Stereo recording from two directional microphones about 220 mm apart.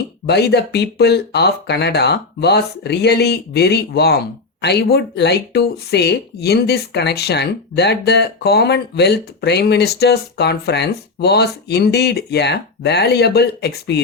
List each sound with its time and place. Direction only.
0.3 s speech: 50° left (ahead or behind)